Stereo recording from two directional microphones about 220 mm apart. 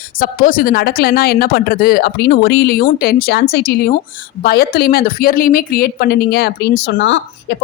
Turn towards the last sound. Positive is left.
turn(degrees=55)  # may be behind; listen again after turning